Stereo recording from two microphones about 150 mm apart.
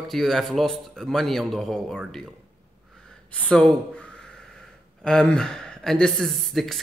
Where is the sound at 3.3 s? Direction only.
10° left (ahead or behind).